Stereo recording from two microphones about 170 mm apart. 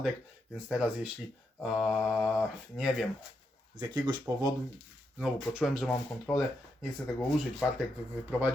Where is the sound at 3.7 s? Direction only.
25° right (ahead or behind).